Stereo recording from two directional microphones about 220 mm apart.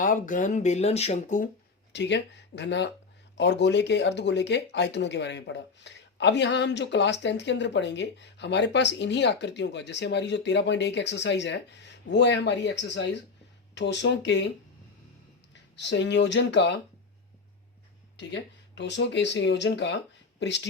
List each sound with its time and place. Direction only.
0.0 s speech: 35° left (ahead or behind)
1.9 s speech: 50° left (ahead or behind)
15.7 s speech: 55° left (ahead or behind)
18.2 s speech: 55° left (ahead or behind)